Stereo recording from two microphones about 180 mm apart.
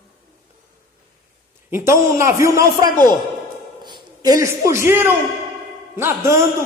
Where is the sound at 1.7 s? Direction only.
15° right (ahead or behind).